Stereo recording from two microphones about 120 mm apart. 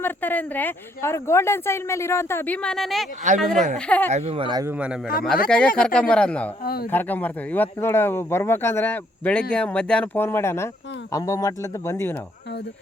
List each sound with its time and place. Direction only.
0.0 s a woman's voice: 15° left (ahead or behind)
4.4 s a man's voice: 40° right (ahead or behind)
5.2 s speech: 5° left (ahead or behind)
10.2 s a woman's voice: 20° left (ahead or behind)